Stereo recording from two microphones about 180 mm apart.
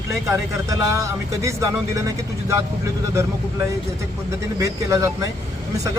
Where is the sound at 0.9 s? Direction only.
15° right (ahead or behind).